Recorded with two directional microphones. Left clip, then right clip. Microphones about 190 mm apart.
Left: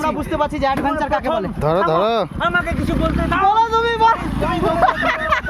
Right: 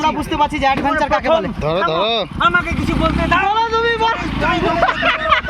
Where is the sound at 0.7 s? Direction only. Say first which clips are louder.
Right 3 dB; 20° right (ahead or behind).